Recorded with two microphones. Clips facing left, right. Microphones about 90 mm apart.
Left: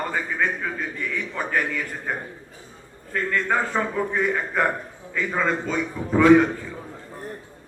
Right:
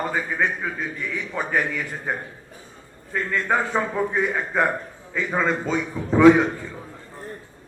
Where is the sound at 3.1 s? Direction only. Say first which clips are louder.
Even; 10° right (ahead or behind).